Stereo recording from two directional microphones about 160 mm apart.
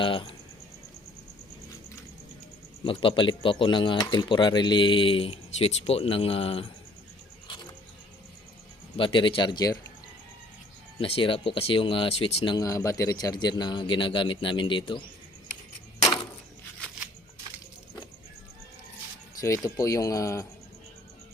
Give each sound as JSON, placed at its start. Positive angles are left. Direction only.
{"t": 0.0, "sound": "speech", "side_deg": 30}
{"t": 2.8, "sound": "speech", "side_deg": 35}
{"t": 9.0, "sound": "speech", "side_deg": 30}
{"t": 11.0, "sound": "speech", "side_deg": 35}
{"t": 19.4, "sound": "speech", "side_deg": 20}